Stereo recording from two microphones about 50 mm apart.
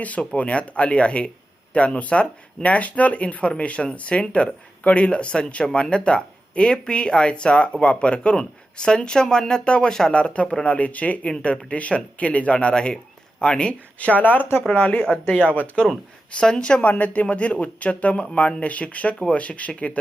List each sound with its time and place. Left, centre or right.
0.0 s speech: left